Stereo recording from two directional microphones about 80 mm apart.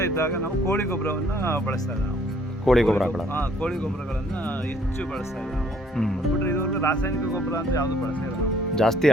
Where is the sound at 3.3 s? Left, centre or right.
Left.